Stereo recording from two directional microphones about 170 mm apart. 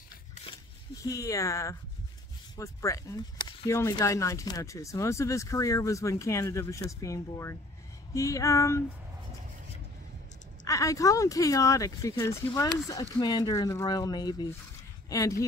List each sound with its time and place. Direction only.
0.9 s speech: 20° left (ahead or behind)
8.1 s female singing: 20° left (ahead or behind)
10.7 s speech: 20° left (ahead or behind)